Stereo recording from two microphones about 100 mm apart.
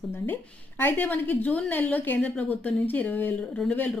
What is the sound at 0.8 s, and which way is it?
A woman's voice, 20° left (ahead or behind).